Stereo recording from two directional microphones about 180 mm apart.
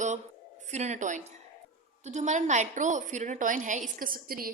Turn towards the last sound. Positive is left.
turn(degrees=-55)  # may be behind; listen again after turning